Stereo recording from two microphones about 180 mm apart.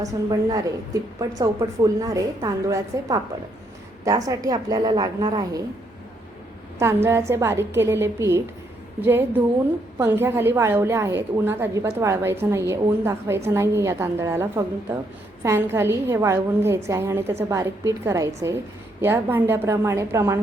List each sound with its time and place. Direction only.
0.0 s a woman's voice: 20° right (ahead or behind)
6.7 s a woman's voice: 15° right (ahead or behind)